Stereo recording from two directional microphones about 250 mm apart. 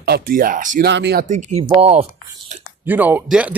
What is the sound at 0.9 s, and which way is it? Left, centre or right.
Speech, right.